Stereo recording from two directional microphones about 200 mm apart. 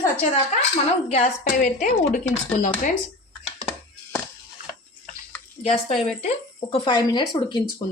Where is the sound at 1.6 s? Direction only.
40° left (ahead or behind).